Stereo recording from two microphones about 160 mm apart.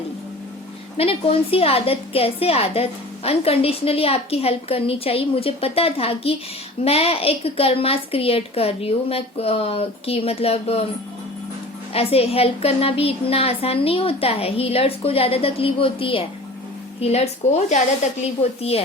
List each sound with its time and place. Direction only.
0.9 s a woman's voice: 35° left (ahead or behind)
11.9 s a woman's voice: 40° left (ahead or behind)